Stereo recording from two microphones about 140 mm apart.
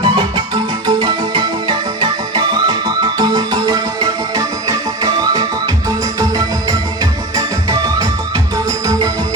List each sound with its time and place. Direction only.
0.0 s music: 35° right (ahead or behind)
5.3 s music: 25° right (ahead or behind)